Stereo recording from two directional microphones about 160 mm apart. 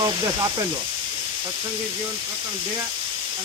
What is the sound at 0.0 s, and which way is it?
Speech, 25° right (ahead or behind).